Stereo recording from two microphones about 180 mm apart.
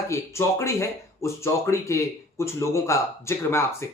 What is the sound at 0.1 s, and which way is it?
Speech, 15° left (ahead or behind).